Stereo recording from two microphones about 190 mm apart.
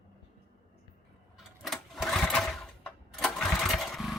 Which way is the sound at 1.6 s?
Centre (ahead or behind).